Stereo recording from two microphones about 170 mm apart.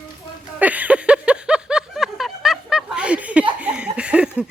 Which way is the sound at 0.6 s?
10° right (ahead or behind).